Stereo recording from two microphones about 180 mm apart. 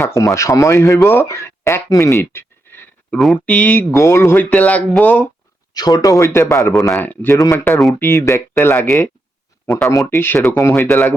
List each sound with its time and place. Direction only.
0.0 s a man's voice: 15° left (ahead or behind)
5.7 s a man's voice: 20° left (ahead or behind)
10.1 s a man's voice: 15° left (ahead or behind)